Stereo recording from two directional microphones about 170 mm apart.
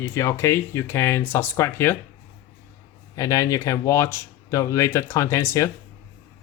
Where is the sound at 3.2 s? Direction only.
20° left (ahead or behind).